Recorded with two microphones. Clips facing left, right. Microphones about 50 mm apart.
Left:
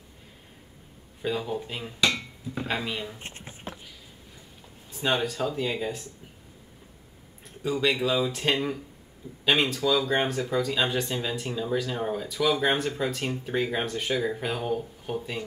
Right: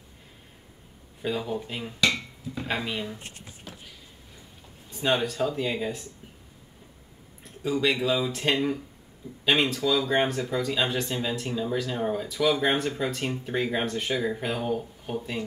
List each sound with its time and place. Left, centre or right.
1.2 s speech: centre
3.2 s a sound: left
4.9 s speech: centre
7.4 s speech: centre